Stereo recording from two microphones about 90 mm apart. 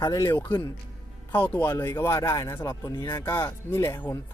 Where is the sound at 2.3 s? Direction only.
40° left (ahead or behind).